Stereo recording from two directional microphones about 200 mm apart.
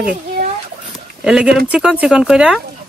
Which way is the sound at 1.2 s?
5° right (ahead or behind).